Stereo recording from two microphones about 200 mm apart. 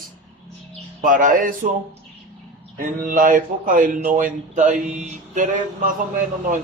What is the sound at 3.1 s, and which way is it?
Speech, 40° right (ahead or behind).